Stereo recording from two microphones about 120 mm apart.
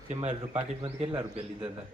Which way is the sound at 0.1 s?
65° right (ahead or behind).